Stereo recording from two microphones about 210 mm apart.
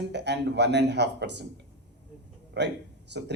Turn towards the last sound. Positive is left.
turn(degrees=-55)  # may be behind; listen again after turning